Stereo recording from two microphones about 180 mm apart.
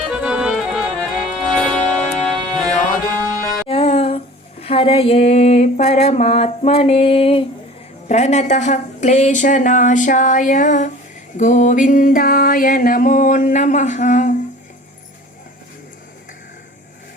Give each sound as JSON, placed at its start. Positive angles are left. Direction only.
{"t": 0.1, "sound": "music", "side_deg": -5}
{"t": 3.7, "sound": "music", "side_deg": 35}
{"t": 4.6, "sound": "a sound", "side_deg": 30}
{"t": 8.0, "sound": "music", "side_deg": 40}